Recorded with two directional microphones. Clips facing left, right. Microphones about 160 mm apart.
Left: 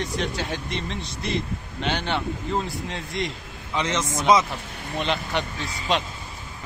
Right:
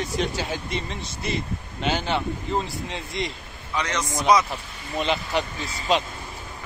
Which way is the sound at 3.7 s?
20° left (ahead or behind).